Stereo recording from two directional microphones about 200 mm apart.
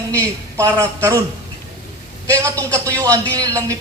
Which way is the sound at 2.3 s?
15° right (ahead or behind).